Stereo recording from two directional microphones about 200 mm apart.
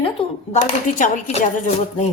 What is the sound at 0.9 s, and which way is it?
Speech, 40° left (ahead or behind).